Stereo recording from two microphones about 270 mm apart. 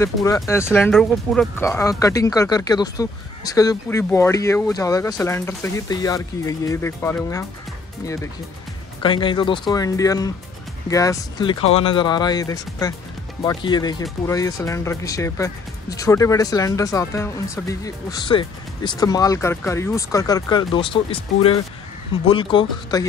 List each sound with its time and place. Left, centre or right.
0.0 s speech: centre
9.0 s speech: centre